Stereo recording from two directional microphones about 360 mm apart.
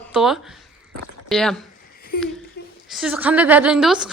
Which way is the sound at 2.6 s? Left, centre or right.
Left.